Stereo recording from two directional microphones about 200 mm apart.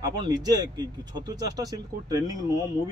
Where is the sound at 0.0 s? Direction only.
20° right (ahead or behind).